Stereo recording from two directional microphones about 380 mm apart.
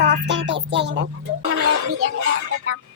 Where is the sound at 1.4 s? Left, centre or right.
Right.